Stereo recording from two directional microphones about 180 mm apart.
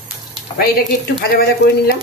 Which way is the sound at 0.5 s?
55° left (ahead or behind).